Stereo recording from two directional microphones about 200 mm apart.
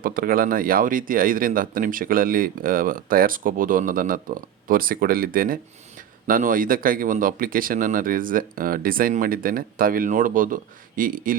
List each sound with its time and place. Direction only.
0.0 s speech: 45° right (ahead or behind)